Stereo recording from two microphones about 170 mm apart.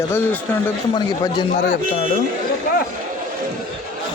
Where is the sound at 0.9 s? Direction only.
25° left (ahead or behind).